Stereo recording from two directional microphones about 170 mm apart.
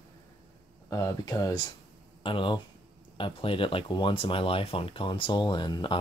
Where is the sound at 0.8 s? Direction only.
20° left (ahead or behind).